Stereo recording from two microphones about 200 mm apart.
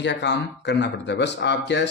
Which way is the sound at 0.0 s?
60° left (ahead or behind).